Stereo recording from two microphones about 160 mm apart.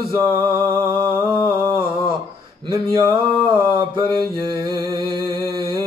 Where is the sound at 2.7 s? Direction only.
30° right (ahead or behind).